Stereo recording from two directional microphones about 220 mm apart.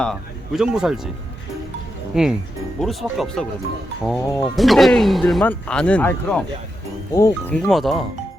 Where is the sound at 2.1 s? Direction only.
5° right (ahead or behind); by 7.3 s 15° left (ahead or behind).